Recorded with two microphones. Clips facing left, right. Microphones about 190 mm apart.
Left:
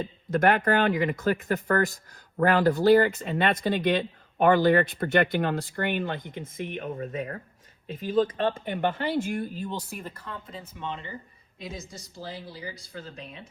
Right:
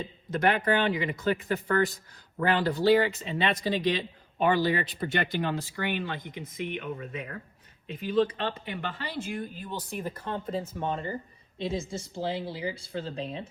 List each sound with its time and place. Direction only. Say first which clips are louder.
0.0 s speech: left 4 dB; 50° left (ahead or behind)
9.6 s speech: even; 5° right (ahead or behind)
10.2 s speech: right 8 dB; 30° right (ahead or behind)
11.6 s speech: right 8 dB; 30° right (ahead or behind)